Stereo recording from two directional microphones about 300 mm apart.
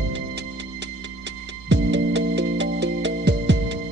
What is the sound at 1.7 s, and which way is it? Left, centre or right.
Music, right.